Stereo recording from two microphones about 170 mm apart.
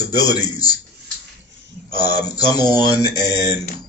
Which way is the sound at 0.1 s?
20° left (ahead or behind).